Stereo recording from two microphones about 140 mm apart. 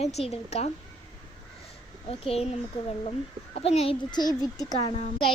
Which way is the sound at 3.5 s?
45° left (ahead or behind).